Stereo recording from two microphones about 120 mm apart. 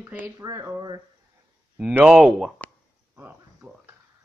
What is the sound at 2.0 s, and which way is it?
Speech, 5° right (ahead or behind).